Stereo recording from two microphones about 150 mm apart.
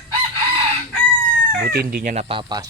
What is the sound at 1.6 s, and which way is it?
Speech, 85° right.